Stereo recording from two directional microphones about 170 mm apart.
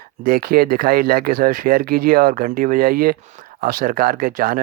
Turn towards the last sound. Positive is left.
turn(degrees=-55)  # may be behind; listen again after turning